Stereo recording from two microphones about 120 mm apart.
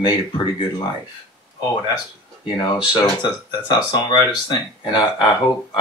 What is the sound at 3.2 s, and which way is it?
Speech, 40° left (ahead or behind).